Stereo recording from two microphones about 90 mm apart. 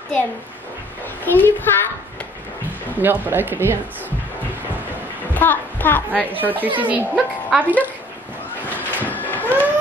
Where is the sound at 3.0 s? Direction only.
20° right (ahead or behind).